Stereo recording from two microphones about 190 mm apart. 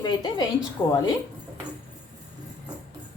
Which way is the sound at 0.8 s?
10° left (ahead or behind).